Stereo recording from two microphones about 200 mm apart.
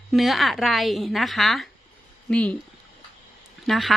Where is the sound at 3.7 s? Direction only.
Centre (ahead or behind).